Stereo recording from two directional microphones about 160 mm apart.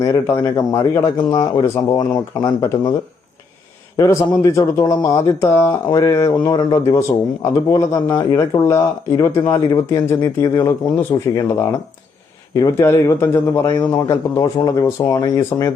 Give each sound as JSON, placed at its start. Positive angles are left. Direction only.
{"t": 0.0, "sound": "speech", "side_deg": 20}
{"t": 3.9, "sound": "speech", "side_deg": 20}
{"t": 12.5, "sound": "speech", "side_deg": 20}